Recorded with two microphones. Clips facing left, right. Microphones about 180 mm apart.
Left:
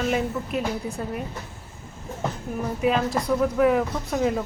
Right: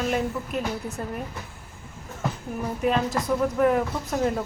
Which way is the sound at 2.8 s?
Centre (ahead or behind).